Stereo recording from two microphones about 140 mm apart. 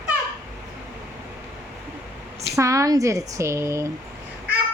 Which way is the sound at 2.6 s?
25° right (ahead or behind).